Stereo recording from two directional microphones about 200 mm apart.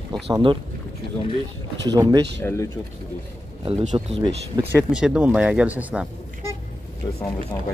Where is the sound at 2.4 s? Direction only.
10° left (ahead or behind).